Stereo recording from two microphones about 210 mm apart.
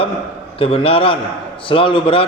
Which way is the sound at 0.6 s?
25° left (ahead or behind).